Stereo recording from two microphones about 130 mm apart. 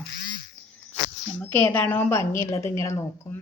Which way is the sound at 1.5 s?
15° left (ahead or behind).